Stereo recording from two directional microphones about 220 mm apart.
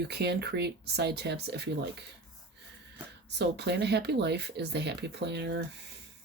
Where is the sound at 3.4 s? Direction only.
50° right (ahead or behind).